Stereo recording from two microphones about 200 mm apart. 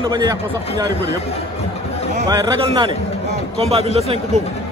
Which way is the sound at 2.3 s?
20° right (ahead or behind).